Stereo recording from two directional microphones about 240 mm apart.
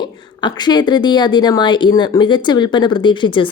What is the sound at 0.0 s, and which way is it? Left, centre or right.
A woman's voice, centre.